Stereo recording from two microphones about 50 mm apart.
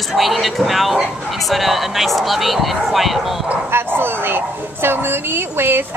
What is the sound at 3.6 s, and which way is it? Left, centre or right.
A woman's voice, right.